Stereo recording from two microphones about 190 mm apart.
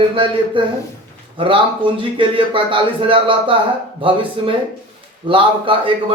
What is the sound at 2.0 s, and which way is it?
A man's voice, 25° right (ahead or behind).